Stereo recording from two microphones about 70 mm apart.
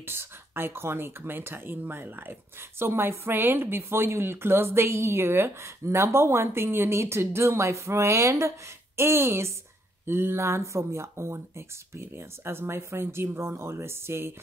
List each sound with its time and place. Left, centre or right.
0.0 s speech: right